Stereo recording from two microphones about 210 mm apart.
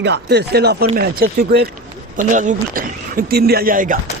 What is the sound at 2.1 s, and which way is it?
Speech, 35° right (ahead or behind).